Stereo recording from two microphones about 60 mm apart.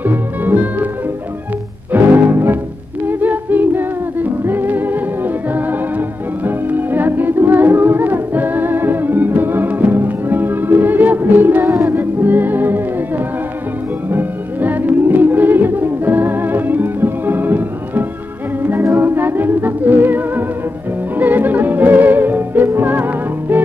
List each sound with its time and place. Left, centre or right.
0.0 s music: right
1.9 s music: right
3.1 s a capella: right
11.9 s music: right
14.1 s music: right